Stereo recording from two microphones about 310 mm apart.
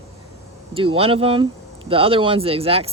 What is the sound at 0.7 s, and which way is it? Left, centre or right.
Speech, centre.